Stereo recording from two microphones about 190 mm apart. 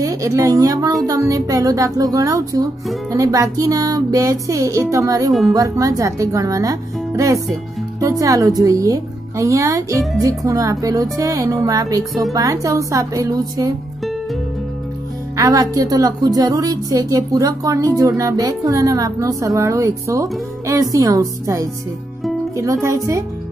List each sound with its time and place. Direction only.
0.0 s a woman's voice: 15° right (ahead or behind)
15.3 s a woman's voice: 20° right (ahead or behind)